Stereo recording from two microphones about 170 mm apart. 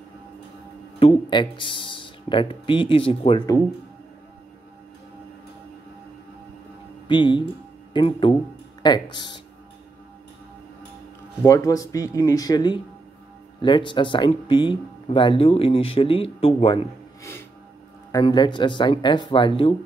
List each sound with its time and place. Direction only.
0.9 s speech: 30° left (ahead or behind)
7.1 s speech: 30° left (ahead or behind)
11.4 s speech: 20° left (ahead or behind)
17.2 s music: 15° left (ahead or behind)
18.1 s speech: 25° left (ahead or behind)